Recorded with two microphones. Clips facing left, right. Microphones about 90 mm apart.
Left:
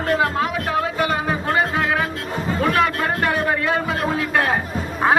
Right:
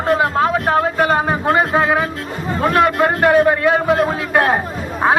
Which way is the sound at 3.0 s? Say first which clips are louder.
Right 8 dB; 25° right (ahead or behind).